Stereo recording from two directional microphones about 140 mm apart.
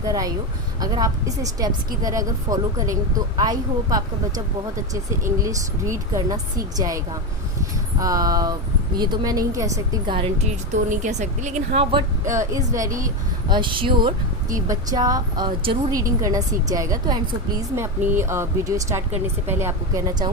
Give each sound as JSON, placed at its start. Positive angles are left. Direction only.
{"t": 0.1, "sound": "a woman's voice", "side_deg": -25}
{"t": 5.4, "sound": "a woman's voice", "side_deg": -25}
{"t": 10.1, "sound": "speech", "side_deg": -40}
{"t": 10.3, "sound": "speech", "side_deg": -60}
{"t": 12.3, "sound": "a woman's voice", "side_deg": -20}
{"t": 13.5, "sound": "speech", "side_deg": -35}
{"t": 14.5, "sound": "a woman's voice", "side_deg": -25}
{"t": 16.2, "sound": "a woman's voice", "side_deg": -25}
{"t": 17.7, "sound": "a woman's voice", "side_deg": -15}